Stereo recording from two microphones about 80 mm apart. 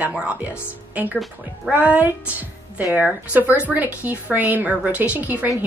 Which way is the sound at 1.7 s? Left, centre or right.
Centre.